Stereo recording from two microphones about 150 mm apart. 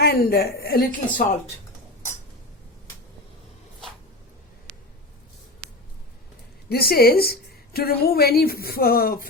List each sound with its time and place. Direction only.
0.0 s a woman's voice: 90° left; by 1.4 s 70° left (ahead or behind)
6.7 s a woman's voice: 90° left